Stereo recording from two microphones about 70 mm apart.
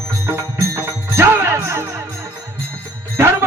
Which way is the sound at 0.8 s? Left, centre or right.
Right.